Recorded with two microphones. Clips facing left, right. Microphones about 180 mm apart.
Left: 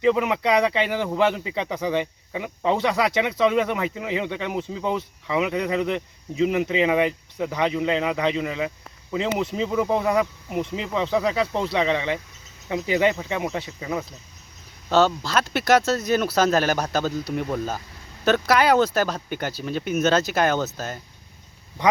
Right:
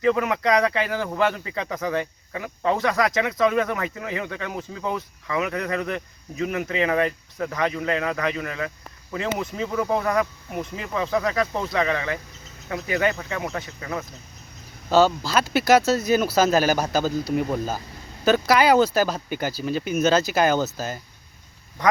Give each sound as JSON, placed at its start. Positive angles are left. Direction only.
{"t": 0.0, "sound": "speech", "side_deg": 15}
{"t": 11.1, "sound": "speech", "side_deg": 10}
{"t": 11.5, "sound": "speech", "side_deg": 20}
{"t": 14.8, "sound": "speech", "side_deg": 0}